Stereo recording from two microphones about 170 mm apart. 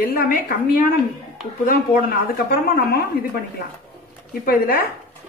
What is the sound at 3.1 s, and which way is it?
A woman's voice, 60° left (ahead or behind).